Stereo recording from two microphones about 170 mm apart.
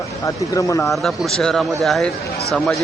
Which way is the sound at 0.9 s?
Centre (ahead or behind).